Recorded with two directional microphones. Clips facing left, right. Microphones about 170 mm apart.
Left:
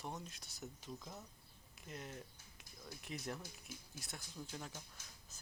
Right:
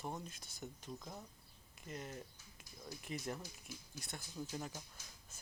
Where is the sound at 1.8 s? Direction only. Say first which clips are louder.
Right 2 dB; centre (ahead or behind).